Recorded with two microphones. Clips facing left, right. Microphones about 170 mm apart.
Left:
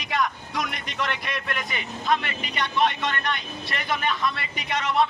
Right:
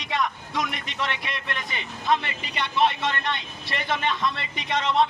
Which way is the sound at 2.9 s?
25° right (ahead or behind).